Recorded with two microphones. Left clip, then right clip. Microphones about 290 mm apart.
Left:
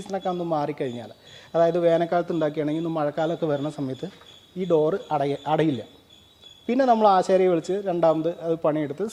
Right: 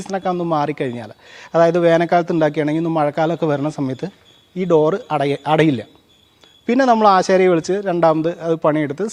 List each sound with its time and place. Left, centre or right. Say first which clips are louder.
0.0 s speech: right 7 dB; right